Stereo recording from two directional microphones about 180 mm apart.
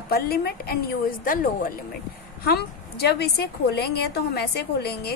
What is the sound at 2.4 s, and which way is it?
A woman's voice, 60° left (ahead or behind).